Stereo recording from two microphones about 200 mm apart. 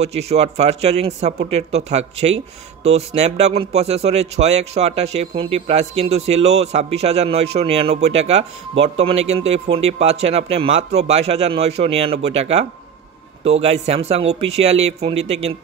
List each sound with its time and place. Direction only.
0.0 s speech: 30° right (ahead or behind)